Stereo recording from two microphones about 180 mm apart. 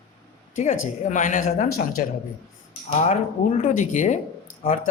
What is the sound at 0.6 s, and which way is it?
A man's voice, 40° left (ahead or behind).